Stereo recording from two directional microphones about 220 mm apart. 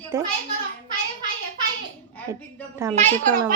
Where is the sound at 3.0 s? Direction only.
30° right (ahead or behind).